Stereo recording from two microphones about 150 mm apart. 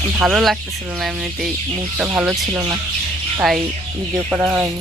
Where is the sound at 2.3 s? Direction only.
20° right (ahead or behind).